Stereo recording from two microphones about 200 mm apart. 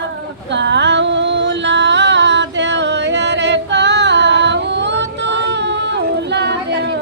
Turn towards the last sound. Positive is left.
turn(degrees=-60)  # may be behind; listen again after turning